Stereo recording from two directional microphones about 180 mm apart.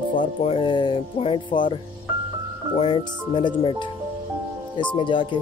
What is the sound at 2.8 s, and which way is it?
Speech, 30° left (ahead or behind).